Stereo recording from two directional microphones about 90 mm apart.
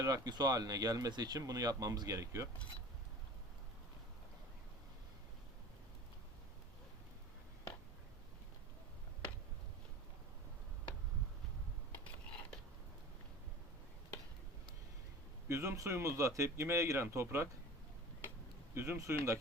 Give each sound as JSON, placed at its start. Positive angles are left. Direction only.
{"t": 0.0, "sound": "speech", "side_deg": -45}
{"t": 15.4, "sound": "speech", "side_deg": -35}
{"t": 18.7, "sound": "speech", "side_deg": -30}